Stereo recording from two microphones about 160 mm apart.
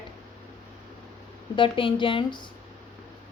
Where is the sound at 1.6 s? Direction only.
35° left (ahead or behind).